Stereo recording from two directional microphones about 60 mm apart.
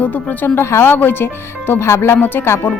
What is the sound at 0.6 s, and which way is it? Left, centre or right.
Speech, left.